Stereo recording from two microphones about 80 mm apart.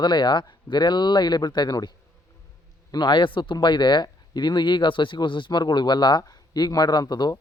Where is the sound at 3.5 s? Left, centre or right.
Left.